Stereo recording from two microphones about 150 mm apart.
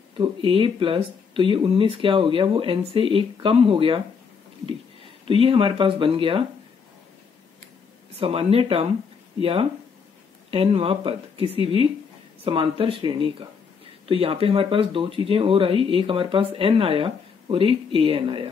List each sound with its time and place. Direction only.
0.2 s speech: 35° right (ahead or behind)
5.3 s speech: 35° right (ahead or behind)
8.2 s speech: 40° right (ahead or behind)